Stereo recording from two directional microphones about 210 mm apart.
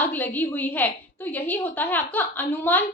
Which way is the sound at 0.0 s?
10° left (ahead or behind).